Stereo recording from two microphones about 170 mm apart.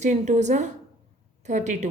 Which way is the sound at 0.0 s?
45° right (ahead or behind).